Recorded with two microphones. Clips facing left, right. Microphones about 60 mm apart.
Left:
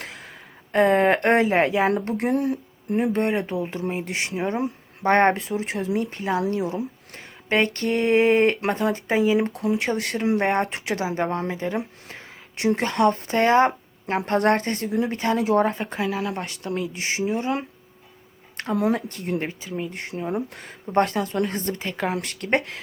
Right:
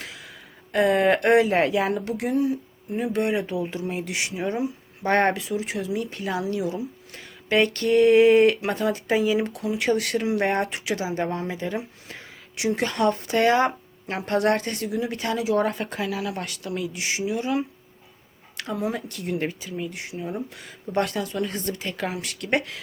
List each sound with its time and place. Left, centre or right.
0.0 s a sound: left
0.7 s speech: left
1.5 s speech: left
2.0 s speech: left
2.3 s speech: left
15.4 s speech: left
15.6 s speech: left
18.5 s a sound: left
18.9 s speech: left
19.4 s speech: left
20.8 s speech: left